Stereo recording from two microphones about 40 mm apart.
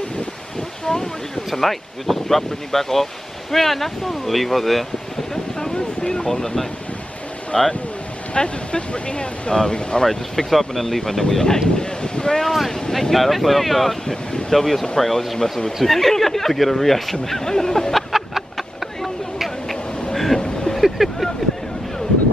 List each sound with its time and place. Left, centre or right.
0.8 s speech: centre
5.8 s speech: centre
10.0 s speech: centre
12.4 s boat: centre
12.9 s speech: centre
17.9 s a sound: centre
20.3 s a sound: left
20.7 s vehicle: centre